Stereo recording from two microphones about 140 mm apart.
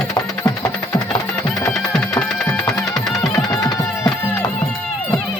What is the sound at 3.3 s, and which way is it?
Music, 25° left (ahead or behind).